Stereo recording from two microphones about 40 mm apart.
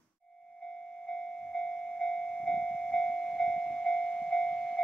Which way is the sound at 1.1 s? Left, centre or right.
Centre.